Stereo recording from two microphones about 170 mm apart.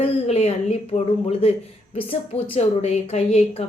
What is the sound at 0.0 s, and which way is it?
Speech, 35° left (ahead or behind).